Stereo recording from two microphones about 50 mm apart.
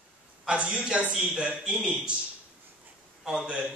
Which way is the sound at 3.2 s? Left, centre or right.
Centre.